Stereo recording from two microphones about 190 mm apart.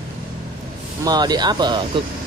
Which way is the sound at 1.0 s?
20° right (ahead or behind).